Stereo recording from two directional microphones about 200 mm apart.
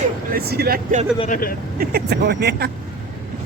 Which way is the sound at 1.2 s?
45° left (ahead or behind).